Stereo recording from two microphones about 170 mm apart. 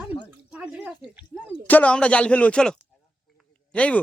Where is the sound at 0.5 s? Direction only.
5° right (ahead or behind).